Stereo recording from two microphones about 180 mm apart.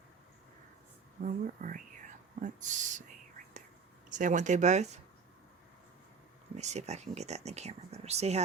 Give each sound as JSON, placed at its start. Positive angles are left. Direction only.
{"t": 1.2, "sound": "speech", "side_deg": -45}
{"t": 4.1, "sound": "speech", "side_deg": -45}
{"t": 6.6, "sound": "speech", "side_deg": -40}